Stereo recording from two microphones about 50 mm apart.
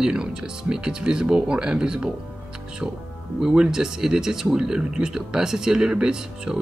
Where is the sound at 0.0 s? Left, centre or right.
Centre.